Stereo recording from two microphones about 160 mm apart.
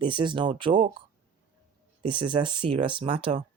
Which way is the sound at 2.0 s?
30° right (ahead or behind).